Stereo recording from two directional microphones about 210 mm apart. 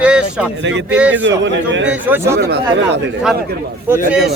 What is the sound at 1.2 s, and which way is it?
Speech, 60° right (ahead or behind).